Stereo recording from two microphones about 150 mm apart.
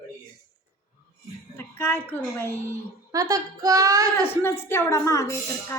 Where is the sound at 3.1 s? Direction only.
20° right (ahead or behind).